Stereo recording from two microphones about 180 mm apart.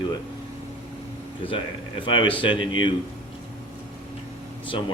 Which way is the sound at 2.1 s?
30° left (ahead or behind).